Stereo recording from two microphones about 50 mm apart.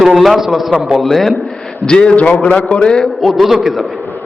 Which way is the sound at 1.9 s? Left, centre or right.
Centre.